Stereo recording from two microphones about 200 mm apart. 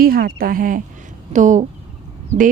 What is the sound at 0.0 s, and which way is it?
A woman's voice, 45° right (ahead or behind).